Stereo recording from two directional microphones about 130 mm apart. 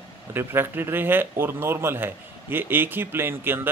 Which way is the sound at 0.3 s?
15° right (ahead or behind).